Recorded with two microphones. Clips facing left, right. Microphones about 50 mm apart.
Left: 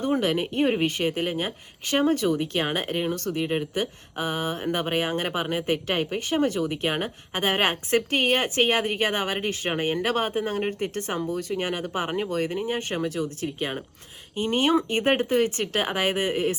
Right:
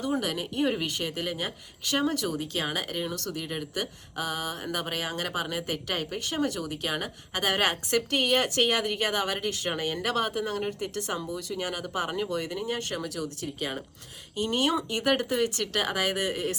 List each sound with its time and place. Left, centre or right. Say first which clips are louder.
0.0 s speech: left 5 dB; left
13.0 s speech: left 6 dB; left